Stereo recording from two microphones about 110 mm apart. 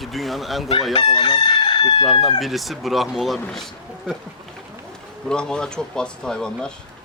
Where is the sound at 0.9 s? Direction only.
50° left (ahead or behind).